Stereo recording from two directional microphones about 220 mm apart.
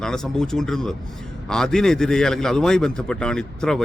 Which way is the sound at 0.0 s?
5° left (ahead or behind).